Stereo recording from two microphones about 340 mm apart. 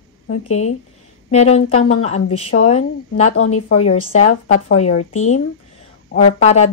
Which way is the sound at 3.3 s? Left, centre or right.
Left.